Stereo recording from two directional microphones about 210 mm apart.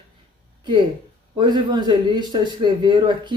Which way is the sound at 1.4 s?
20° right (ahead or behind).